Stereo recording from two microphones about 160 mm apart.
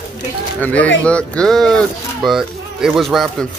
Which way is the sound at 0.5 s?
10° left (ahead or behind).